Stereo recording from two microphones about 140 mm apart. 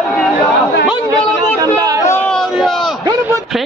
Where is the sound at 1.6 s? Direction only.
25° right (ahead or behind).